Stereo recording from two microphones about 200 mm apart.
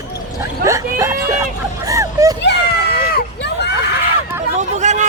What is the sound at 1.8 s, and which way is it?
Vehicle, 15° right (ahead or behind).